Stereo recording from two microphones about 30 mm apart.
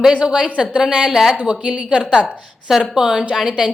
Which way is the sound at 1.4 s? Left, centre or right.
Right.